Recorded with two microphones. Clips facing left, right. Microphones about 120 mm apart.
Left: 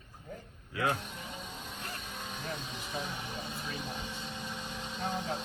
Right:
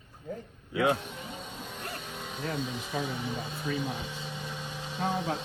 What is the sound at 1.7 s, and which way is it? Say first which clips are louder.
Music: right 3 dB; 30° right (ahead or behind).